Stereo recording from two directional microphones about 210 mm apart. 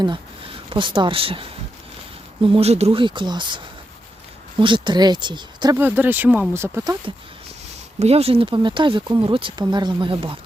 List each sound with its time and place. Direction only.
0.0 s speech: 25° right (ahead or behind)
5.8 s speech: 10° right (ahead or behind)
7.9 s speech: 30° right (ahead or behind)